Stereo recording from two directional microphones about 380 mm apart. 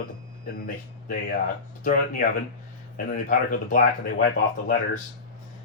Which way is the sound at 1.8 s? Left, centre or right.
Left.